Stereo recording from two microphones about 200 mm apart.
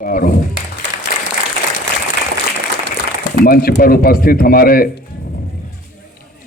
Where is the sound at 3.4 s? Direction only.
45° left (ahead or behind).